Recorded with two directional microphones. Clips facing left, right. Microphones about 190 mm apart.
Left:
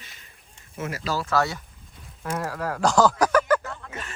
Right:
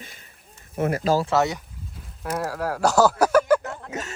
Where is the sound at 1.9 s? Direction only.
5° right (ahead or behind).